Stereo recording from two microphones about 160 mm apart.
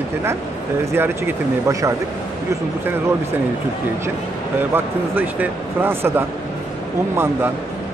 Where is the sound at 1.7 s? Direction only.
20° right (ahead or behind).